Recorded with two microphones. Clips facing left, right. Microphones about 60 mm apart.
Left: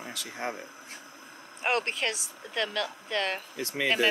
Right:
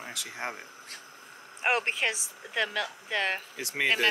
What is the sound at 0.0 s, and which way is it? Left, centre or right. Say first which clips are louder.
Speech: left 1 dB; centre.